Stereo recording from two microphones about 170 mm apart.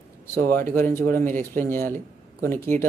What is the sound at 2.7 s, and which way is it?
Speech, 45° right (ahead or behind).